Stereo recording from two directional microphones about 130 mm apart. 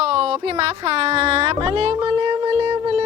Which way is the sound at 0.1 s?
50° right (ahead or behind).